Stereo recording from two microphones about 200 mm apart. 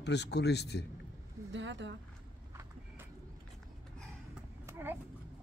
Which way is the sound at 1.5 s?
65° right (ahead or behind).